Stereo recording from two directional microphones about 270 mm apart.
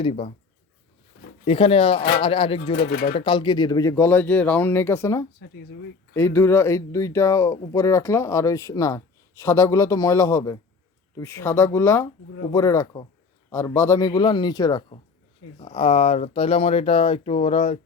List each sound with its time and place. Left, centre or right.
0.0 s speech: left
1.5 s speech: left
2.8 s speech: left
3.2 s speech: centre
5.4 s speech: left
6.1 s speech: centre